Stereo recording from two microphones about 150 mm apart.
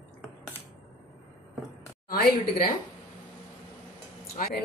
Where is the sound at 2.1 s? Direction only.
80° left.